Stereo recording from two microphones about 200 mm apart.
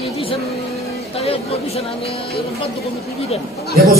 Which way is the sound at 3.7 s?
50° right (ahead or behind).